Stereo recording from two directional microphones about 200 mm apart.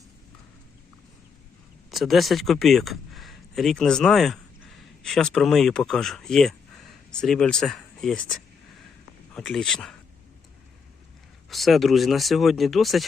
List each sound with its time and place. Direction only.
1.9 s speech: centre (ahead or behind)
11.4 s speech: centre (ahead or behind)